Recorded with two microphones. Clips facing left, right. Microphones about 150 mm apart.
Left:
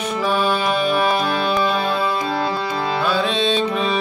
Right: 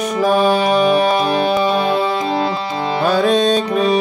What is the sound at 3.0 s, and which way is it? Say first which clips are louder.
Speech: right 8 dB; 45° right (ahead or behind).